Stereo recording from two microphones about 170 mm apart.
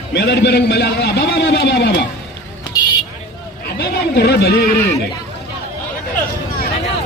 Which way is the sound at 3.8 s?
75° left (ahead or behind).